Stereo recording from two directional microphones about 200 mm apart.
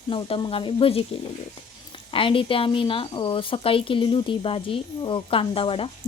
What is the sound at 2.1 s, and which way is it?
A woman's voice, 25° left (ahead or behind).